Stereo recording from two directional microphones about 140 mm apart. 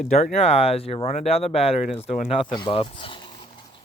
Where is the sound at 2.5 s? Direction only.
35° left (ahead or behind).